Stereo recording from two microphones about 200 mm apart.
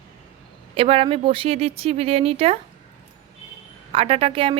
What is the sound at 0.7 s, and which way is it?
Speech, 25° right (ahead or behind).